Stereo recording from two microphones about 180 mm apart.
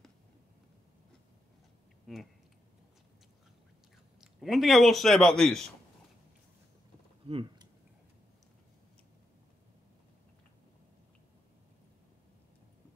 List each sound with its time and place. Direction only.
2.1 s a man's voice: centre (ahead or behind)
4.2 s a man's voice: centre (ahead or behind)
7.2 s typing: 30° right (ahead or behind)